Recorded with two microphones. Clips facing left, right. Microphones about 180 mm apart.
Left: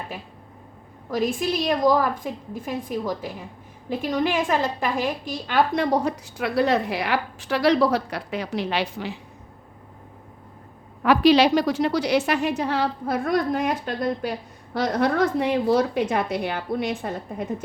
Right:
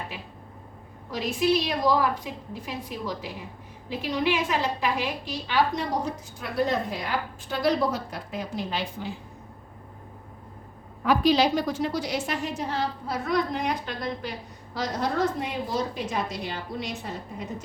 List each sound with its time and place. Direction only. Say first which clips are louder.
1.1 s a woman's voice: left 1 dB; 50° left (ahead or behind); by 9.1 s 75° left (ahead or behind)
11.0 s a woman's voice: left 5 dB; 75° left (ahead or behind); by 17.5 s 55° left (ahead or behind)